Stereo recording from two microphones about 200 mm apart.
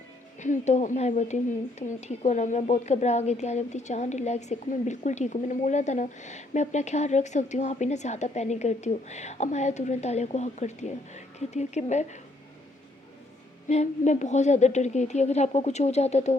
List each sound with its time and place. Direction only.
0.3 s a woman's voice: 40° left (ahead or behind)
13.7 s a woman's voice: 35° left (ahead or behind)